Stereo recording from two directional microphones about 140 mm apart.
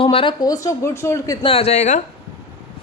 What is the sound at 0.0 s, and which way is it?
Speech, 40° left (ahead or behind).